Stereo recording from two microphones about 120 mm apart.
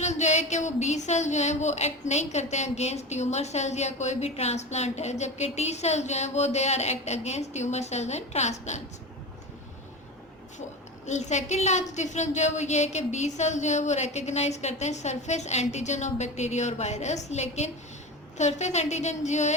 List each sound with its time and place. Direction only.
0.0 s speech: 75° left (ahead or behind)
11.0 s speech: 75° left (ahead or behind)